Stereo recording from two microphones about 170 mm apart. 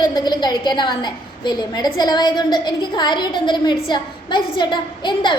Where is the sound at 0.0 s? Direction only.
25° left (ahead or behind).